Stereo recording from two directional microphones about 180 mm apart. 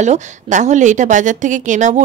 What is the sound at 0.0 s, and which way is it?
Speech, 40° right (ahead or behind).